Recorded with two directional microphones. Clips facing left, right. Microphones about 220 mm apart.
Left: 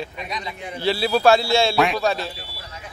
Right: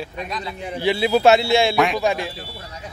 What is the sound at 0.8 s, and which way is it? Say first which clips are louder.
A man's voice: right 2 dB; 15° right (ahead or behind).